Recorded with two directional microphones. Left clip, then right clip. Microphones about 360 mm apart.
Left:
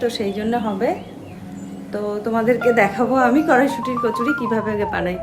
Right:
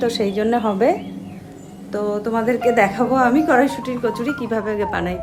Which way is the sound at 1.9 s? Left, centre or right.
Centre.